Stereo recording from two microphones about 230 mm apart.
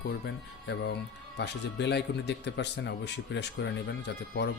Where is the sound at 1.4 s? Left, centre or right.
Left.